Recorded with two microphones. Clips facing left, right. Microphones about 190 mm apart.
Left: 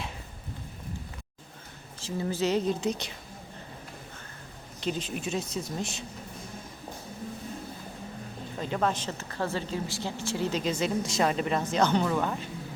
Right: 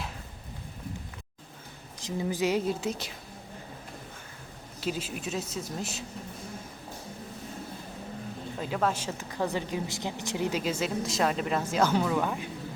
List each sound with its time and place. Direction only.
2.0 s a woman's voice: 15° right (ahead or behind)
4.8 s a woman's voice: 5° right (ahead or behind)
8.6 s a woman's voice: 5° right (ahead or behind)
10.6 s a woman's voice: 5° right (ahead or behind)